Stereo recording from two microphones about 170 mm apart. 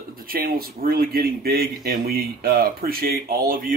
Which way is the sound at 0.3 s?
60° right (ahead or behind).